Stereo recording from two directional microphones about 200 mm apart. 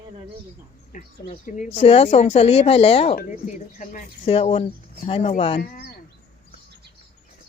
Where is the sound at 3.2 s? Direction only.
40° left (ahead or behind).